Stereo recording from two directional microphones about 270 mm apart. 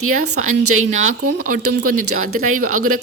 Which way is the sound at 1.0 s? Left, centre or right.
Right.